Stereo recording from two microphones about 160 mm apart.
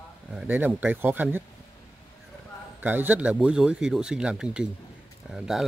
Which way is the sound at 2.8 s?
10° right (ahead or behind).